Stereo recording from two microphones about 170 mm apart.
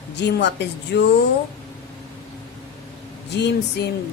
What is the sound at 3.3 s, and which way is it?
Speech, 90° left.